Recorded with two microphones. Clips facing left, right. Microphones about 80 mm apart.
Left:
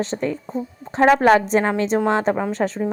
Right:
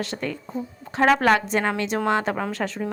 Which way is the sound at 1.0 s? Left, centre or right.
Centre.